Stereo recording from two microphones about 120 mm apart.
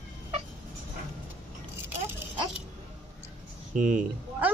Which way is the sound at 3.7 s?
90° right.